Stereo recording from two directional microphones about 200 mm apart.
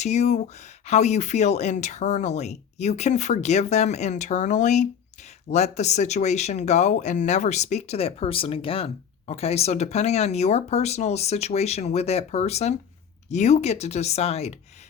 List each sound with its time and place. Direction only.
0.0 s speech: 35° left (ahead or behind)